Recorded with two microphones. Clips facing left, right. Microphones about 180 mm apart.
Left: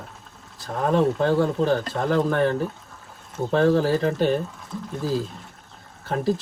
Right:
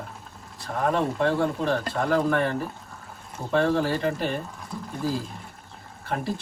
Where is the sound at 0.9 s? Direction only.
35° left (ahead or behind).